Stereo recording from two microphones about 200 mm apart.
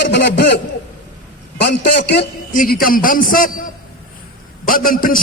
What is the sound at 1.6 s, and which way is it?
A man's voice, 55° left (ahead or behind).